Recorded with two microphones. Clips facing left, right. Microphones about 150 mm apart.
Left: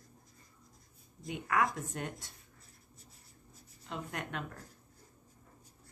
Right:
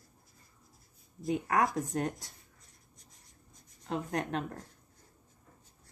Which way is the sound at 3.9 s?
35° right (ahead or behind).